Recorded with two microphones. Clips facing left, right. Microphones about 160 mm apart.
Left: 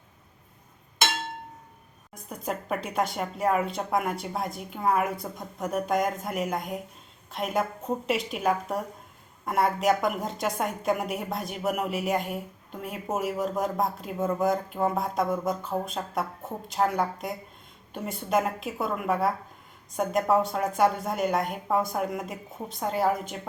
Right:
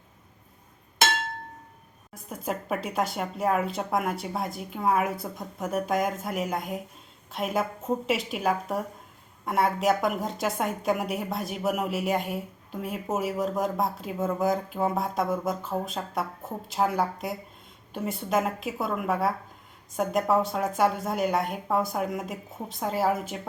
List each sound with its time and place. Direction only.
2.3 s a woman's voice: centre (ahead or behind)